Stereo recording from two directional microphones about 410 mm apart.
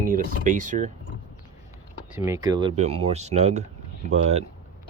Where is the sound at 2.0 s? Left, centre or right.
Centre.